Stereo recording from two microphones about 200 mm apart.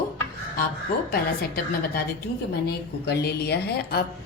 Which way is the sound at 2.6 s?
55° left (ahead or behind).